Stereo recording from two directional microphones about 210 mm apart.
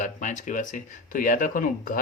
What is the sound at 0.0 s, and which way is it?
Speech, 35° left (ahead or behind).